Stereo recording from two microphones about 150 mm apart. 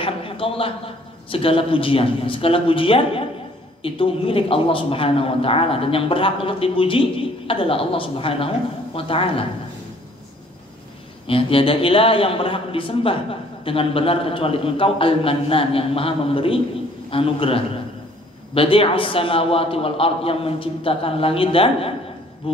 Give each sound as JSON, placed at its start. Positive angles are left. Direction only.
{"t": 0.0, "sound": "a man's voice", "side_deg": 35}
{"t": 11.2, "sound": "a man's voice", "side_deg": 35}